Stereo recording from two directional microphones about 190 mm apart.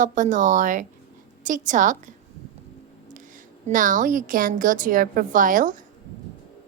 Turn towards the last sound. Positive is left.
turn(degrees=-45)  # may be behind; listen again after turning